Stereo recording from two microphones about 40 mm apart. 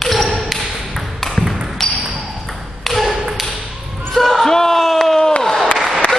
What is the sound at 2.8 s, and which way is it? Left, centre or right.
Tap, centre.